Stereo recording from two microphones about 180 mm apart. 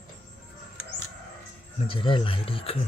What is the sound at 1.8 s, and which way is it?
Speech, 30° left (ahead or behind).